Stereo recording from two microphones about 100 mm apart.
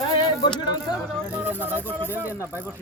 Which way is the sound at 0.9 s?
10° right (ahead or behind).